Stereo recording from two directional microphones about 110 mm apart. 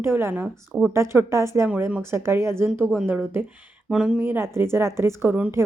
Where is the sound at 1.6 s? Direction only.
15° right (ahead or behind).